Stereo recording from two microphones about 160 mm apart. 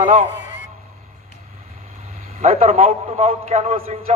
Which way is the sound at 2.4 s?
40° right (ahead or behind).